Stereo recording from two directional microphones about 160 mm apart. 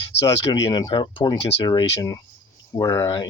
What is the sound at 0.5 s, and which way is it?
Speech, 25° left (ahead or behind).